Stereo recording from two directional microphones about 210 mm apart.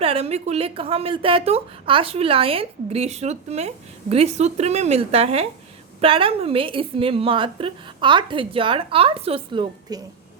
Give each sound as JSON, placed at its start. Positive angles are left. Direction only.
{"t": 0.0, "sound": "a woman's voice", "side_deg": -30}